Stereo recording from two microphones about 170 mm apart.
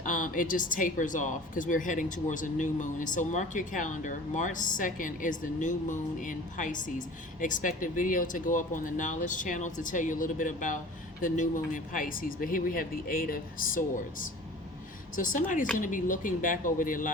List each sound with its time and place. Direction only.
0.0 s speech: 50° left (ahead or behind)